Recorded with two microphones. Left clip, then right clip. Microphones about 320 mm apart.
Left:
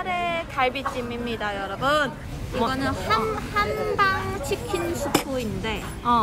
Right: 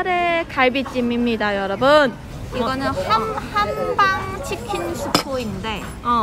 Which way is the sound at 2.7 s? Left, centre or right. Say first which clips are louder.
Right 7 dB; centre.